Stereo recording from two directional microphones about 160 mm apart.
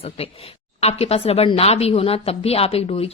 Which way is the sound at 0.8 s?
40° left (ahead or behind).